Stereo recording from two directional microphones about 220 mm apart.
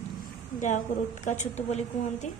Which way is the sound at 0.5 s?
35° left (ahead or behind).